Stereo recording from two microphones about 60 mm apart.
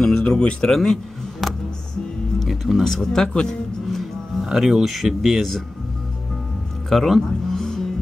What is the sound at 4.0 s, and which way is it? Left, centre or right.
Speech, centre.